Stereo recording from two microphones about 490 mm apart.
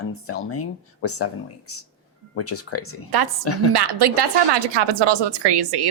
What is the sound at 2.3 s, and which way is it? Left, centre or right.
Speech, left.